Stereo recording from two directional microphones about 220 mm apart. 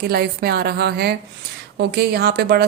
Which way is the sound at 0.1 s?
45° right (ahead or behind).